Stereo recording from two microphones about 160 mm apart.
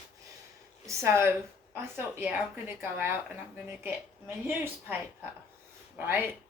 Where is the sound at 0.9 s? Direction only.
15° right (ahead or behind).